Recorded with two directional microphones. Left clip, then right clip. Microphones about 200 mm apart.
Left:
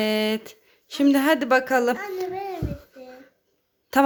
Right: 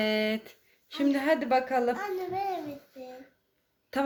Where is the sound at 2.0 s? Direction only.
5° left (ahead or behind).